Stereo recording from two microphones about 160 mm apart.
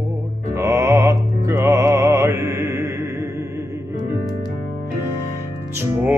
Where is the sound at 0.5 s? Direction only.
20° right (ahead or behind).